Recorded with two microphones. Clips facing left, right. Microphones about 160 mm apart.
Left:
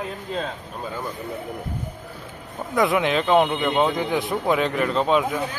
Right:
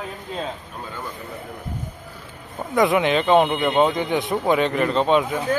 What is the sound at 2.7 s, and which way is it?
A man's voice, centre (ahead or behind).